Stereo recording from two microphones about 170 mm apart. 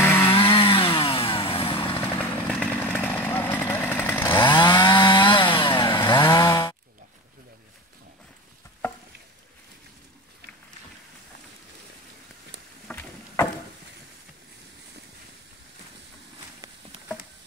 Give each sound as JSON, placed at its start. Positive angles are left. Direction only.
{"t": 0.0, "sound": "chainsaw", "side_deg": 15}
{"t": 0.3, "sound": "chainsaw", "side_deg": 30}
{"t": 2.0, "sound": "chainsaw", "side_deg": 10}
{"t": 4.5, "sound": "chainsaw", "side_deg": 25}
{"t": 12.8, "sound": "boat", "side_deg": 15}